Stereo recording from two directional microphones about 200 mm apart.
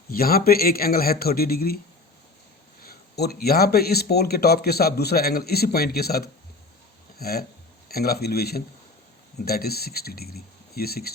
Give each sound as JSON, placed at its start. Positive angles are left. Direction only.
{"t": 0.1, "sound": "speech", "side_deg": 50}
{"t": 2.8, "sound": "speech", "side_deg": 50}